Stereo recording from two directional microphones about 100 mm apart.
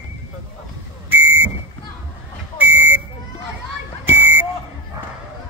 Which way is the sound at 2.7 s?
20° right (ahead or behind).